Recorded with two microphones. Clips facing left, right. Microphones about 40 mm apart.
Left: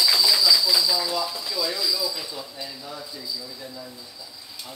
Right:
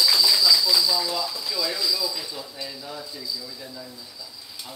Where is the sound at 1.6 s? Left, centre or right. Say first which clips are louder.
Even; centre.